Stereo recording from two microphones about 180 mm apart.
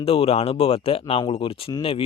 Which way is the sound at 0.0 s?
30° left (ahead or behind).